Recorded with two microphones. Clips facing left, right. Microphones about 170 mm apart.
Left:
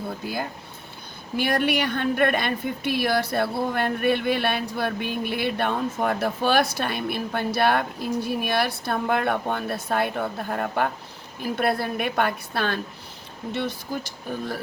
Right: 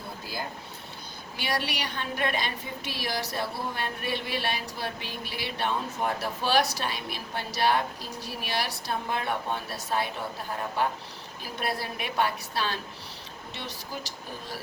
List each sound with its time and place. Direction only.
1.4 s a woman's voice: 55° left (ahead or behind)